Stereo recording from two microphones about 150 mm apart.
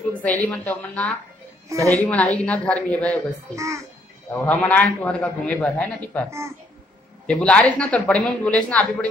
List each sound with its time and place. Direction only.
0.2 s a man's voice: 10° left (ahead or behind)
1.7 s a woman's voice: 20° right (ahead or behind)
2.0 s a man's voice: 10° left (ahead or behind)
3.5 s a woman's voice: 20° right (ahead or behind)
4.3 s a man's voice: 10° left (ahead or behind)
7.2 s a man's voice: 10° left (ahead or behind)